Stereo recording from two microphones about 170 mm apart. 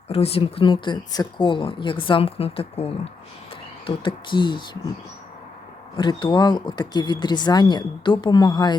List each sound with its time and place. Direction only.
0.1 s speech: 35° left (ahead or behind)
6.0 s speech: 30° left (ahead or behind)